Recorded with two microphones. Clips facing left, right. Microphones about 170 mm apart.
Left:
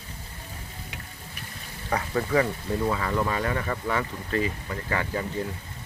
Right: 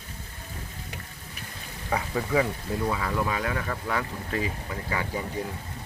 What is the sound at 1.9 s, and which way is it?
Speech, 5° right (ahead or behind).